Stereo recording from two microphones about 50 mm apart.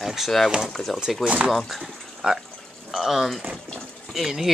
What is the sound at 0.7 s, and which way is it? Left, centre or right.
Speech, centre.